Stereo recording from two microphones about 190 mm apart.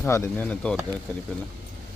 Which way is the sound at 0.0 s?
10° left (ahead or behind).